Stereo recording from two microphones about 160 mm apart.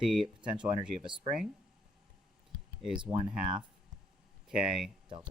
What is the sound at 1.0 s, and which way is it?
Speech, 30° right (ahead or behind).